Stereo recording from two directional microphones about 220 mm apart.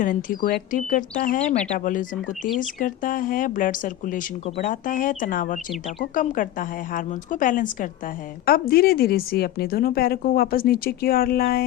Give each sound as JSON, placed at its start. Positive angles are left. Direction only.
{"t": 0.0, "sound": "speech", "side_deg": 35}